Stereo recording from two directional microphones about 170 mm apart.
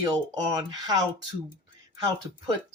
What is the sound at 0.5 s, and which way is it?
Speech, 25° right (ahead or behind).